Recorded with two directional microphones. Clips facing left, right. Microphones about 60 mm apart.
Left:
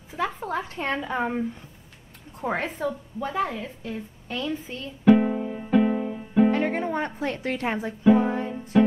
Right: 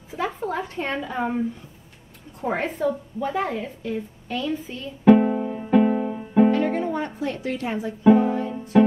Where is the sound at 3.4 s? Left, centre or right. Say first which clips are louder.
Even; centre.